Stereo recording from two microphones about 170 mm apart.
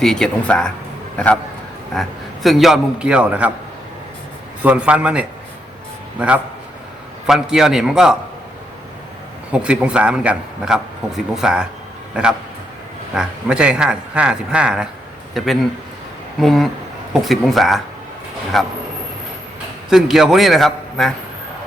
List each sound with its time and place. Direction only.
0.0 s a man's voice: 5° left (ahead or behind)
4.6 s a man's voice: 5° right (ahead or behind)
9.5 s a man's voice: 5° right (ahead or behind)
19.9 s a man's voice: centre (ahead or behind)